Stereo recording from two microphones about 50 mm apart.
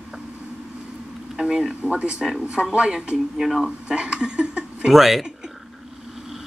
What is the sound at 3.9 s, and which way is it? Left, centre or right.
Speech, centre.